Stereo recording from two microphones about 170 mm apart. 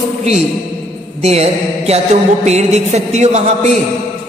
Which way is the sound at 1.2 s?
40° right (ahead or behind).